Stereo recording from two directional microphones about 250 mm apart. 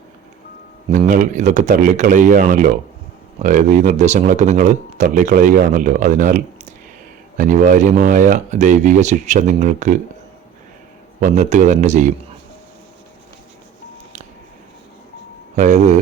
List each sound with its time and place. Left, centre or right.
0.9 s speech: right
11.2 s speech: right
15.5 s speech: right